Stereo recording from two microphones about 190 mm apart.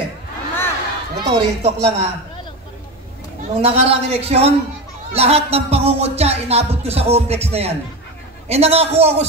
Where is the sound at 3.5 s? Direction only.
30° right (ahead or behind).